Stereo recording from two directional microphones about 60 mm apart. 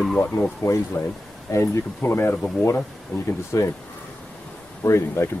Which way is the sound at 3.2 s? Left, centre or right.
Left.